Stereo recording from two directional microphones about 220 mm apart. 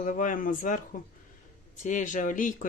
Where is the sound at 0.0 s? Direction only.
35° left (ahead or behind).